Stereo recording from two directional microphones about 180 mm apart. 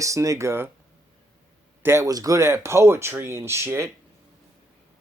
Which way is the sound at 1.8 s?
15° right (ahead or behind).